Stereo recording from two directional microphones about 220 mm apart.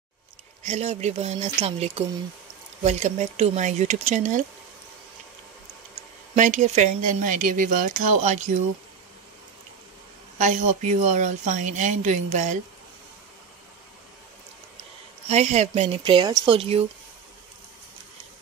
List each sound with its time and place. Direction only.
0.7 s speech: 30° right (ahead or behind)
6.3 s speech: 35° right (ahead or behind)
10.4 s speech: 35° right (ahead or behind)
15.2 s speech: 30° right (ahead or behind)